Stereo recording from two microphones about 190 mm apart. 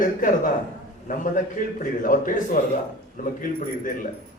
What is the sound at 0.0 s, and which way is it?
Speech, 45° left (ahead or behind).